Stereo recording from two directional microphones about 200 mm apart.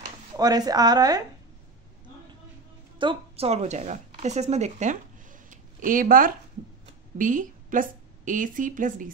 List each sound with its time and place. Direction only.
0.4 s a woman's voice: 20° right (ahead or behind)
3.0 s a woman's voice: 25° right (ahead or behind)